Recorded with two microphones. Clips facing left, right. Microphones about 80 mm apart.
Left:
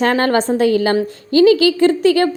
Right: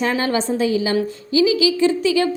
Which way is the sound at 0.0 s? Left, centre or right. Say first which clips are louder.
Left 5 dB; left.